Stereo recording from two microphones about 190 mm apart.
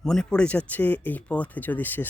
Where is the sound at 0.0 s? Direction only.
5° left (ahead or behind).